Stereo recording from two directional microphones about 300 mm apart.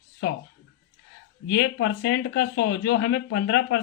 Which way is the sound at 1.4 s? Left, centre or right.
Left.